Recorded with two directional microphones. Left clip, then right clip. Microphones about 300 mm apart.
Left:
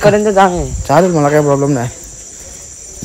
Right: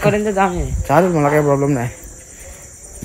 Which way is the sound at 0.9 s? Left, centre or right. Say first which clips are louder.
Left 4 dB; centre.